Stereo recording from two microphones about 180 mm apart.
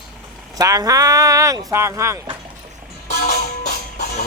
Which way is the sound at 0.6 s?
20° right (ahead or behind).